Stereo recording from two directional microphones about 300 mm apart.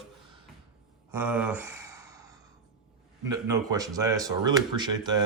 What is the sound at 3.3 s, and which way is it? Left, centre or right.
Speech, centre.